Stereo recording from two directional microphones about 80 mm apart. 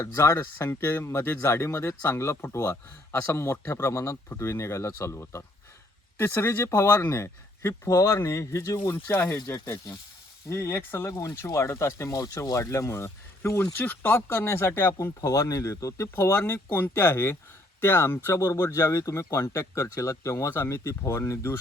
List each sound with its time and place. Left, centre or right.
0.0 s speech: left
8.8 s speech: left
14.9 s speech: left